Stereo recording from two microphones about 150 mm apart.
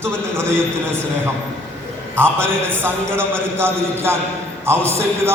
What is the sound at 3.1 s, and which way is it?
A man's voice, 15° right (ahead or behind).